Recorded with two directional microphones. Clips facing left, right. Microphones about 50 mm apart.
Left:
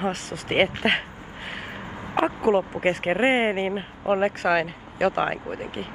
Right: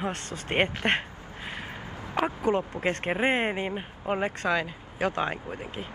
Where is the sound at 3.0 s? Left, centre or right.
Centre.